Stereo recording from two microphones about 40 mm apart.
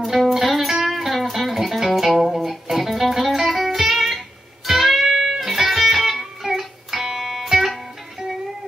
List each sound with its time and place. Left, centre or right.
0.0 s music: centre